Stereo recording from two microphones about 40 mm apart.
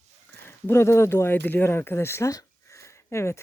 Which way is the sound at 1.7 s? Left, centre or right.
Left.